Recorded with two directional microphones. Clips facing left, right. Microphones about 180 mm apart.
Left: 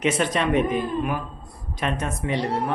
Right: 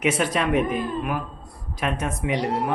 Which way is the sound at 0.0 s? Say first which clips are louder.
Even; 5° right (ahead or behind).